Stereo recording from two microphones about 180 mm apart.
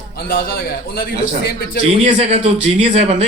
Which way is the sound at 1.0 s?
60° left (ahead or behind).